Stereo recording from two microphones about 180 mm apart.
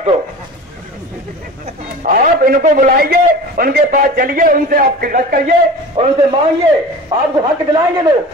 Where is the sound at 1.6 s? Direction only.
50° right (ahead or behind).